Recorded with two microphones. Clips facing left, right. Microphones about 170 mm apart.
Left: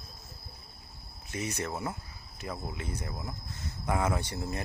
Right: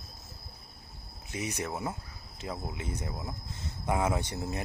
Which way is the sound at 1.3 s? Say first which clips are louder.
Even; 15° right (ahead or behind).